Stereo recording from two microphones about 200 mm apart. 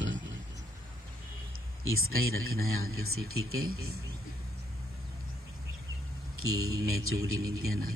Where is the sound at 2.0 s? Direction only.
90° right.